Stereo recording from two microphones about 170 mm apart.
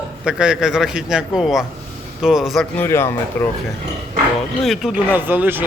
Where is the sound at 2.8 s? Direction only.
15° left (ahead or behind).